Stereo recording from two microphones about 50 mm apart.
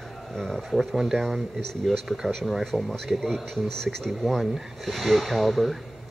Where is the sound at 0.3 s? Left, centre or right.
Centre.